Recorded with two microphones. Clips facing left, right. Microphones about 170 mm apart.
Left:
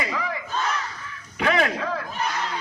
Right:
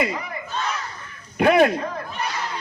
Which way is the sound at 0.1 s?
90° left.